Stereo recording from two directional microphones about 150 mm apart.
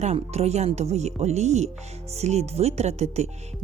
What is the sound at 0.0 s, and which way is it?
Speech, 45° right (ahead or behind).